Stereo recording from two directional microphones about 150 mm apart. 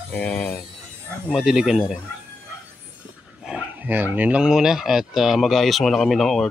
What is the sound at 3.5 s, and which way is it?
Speech, 10° right (ahead or behind).